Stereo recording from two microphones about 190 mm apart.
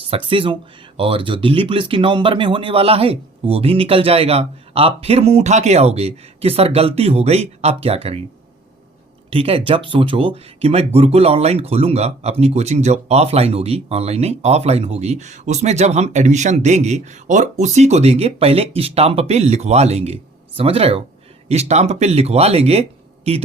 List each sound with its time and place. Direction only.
0.1 s speech: 30° right (ahead or behind)
9.3 s speech: 30° right (ahead or behind)